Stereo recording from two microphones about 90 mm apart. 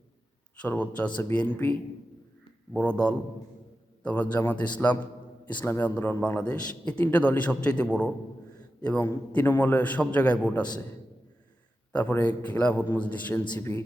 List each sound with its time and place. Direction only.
0.6 s a man's voice: 15° left (ahead or behind)
2.7 s a man's voice: 15° left (ahead or behind)
11.9 s a man's voice: 15° left (ahead or behind)